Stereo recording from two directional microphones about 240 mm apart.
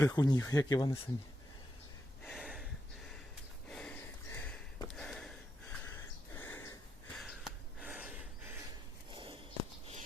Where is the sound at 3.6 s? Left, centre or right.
Centre.